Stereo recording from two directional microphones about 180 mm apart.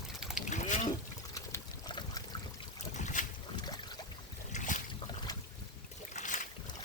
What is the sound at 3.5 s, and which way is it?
Boat, 25° left (ahead or behind).